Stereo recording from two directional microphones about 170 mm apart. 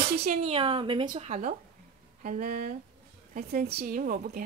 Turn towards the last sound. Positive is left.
turn(degrees=-55)  # may be behind; listen again after turning